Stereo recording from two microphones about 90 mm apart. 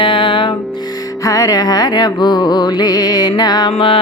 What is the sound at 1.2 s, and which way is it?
Music, 40° left (ahead or behind).